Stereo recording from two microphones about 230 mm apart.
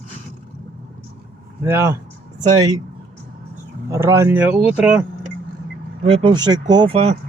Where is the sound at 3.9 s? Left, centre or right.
Centre.